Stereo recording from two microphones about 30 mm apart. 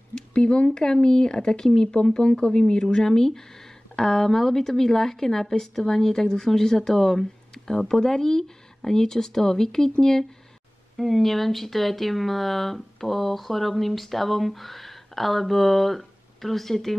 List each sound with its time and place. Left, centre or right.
0.3 s speech: left; by 10.2 s centre
11.0 s speech: centre